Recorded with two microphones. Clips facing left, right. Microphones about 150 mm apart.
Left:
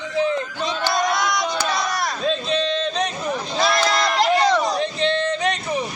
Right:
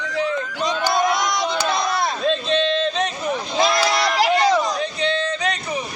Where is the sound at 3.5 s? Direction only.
15° right (ahead or behind).